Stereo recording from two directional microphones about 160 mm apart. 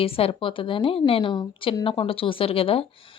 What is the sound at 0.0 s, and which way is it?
A woman's voice, 35° left (ahead or behind).